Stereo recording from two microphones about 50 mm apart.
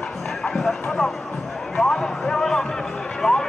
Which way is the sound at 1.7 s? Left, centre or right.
Centre.